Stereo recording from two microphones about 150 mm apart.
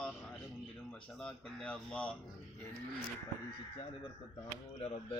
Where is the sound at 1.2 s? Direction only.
5° left (ahead or behind).